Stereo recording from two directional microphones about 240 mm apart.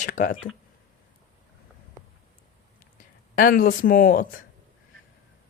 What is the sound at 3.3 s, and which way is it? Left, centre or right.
Speech, left.